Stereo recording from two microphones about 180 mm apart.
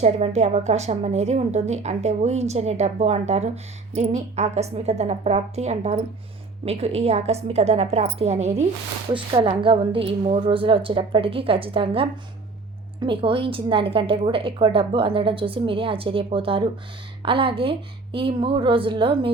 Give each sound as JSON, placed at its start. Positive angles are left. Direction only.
{"t": 0.0, "sound": "a woman's voice", "side_deg": -35}